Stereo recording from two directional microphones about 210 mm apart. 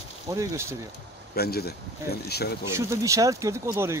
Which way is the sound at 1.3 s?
50° left (ahead or behind).